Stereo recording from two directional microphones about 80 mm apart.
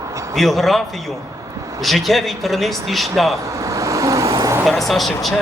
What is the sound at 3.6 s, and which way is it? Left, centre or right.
Vehicle, right.